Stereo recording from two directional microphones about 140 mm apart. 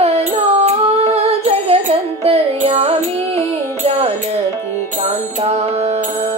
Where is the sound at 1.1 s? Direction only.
50° right (ahead or behind).